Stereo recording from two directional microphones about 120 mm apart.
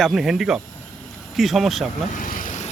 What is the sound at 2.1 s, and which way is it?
Vehicle, 90° left.